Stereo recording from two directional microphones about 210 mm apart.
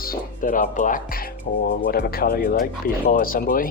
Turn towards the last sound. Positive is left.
turn(degrees=40)  # may be behind; listen again after turning